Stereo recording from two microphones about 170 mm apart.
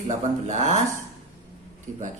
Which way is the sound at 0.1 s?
45° right (ahead or behind).